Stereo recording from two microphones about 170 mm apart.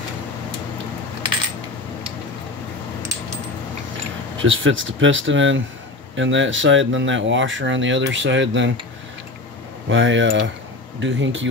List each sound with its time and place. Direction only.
4.4 s speech: 90° right
9.8 s speech: 90° right